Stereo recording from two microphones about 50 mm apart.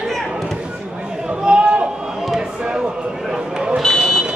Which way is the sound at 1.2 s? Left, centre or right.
Centre.